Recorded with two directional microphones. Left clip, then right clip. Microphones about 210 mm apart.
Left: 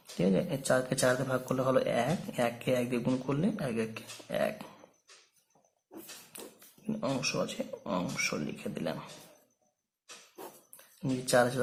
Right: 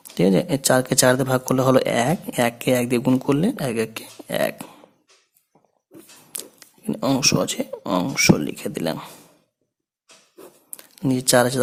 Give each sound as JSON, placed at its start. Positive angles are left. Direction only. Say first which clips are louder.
{"t": 0.2, "sound": "speech", "louder": "right 11 dB", "side_deg": -50}
{"t": 6.3, "sound": "speech", "louder": "right 10 dB", "side_deg": -45}
{"t": 10.8, "sound": "speech", "louder": "right 12 dB", "side_deg": -45}